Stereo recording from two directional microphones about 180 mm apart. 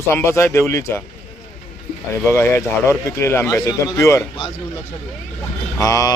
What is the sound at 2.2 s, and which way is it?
Speech, 15° left (ahead or behind).